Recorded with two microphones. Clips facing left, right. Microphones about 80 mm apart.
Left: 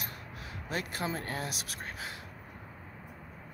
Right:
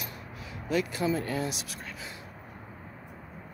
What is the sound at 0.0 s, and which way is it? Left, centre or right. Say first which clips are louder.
Speech: right 2 dB; left.